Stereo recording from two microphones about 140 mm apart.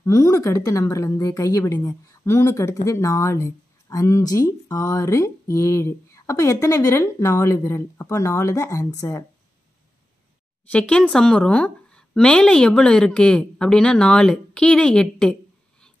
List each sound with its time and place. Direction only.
0.0 s a woman's voice: 25° left (ahead or behind)
10.7 s a woman's voice: 10° left (ahead or behind)